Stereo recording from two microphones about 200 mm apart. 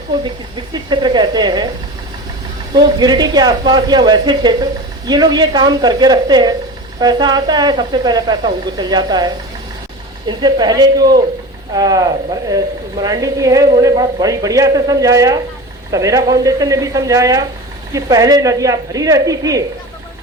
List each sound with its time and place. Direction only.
0.7 s speech: 20° right (ahead or behind)
2.7 s speech: 20° right (ahead or behind)